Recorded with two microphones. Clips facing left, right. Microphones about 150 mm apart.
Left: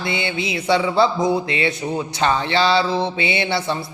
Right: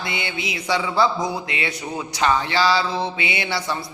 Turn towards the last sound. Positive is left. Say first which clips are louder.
# left 4 dB
turn(degrees=25)  # may be behind; listen again after turning